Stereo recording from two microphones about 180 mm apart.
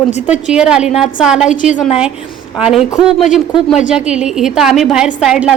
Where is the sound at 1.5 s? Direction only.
40° left (ahead or behind).